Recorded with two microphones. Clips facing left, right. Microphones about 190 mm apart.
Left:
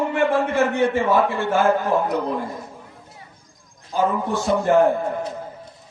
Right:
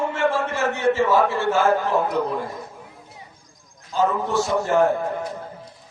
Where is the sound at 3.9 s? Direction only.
55° left (ahead or behind).